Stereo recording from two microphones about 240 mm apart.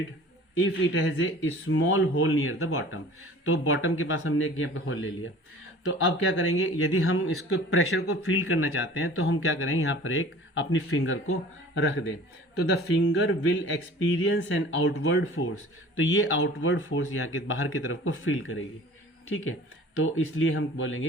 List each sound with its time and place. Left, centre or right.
0.6 s speech: left
20.0 s speech: left